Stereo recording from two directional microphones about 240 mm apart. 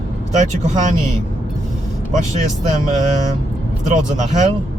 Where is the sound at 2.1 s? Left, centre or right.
Right.